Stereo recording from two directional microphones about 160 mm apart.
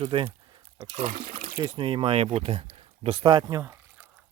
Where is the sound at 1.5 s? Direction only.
20° right (ahead or behind).